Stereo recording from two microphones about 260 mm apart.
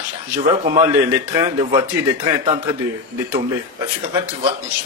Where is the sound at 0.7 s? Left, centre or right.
Centre.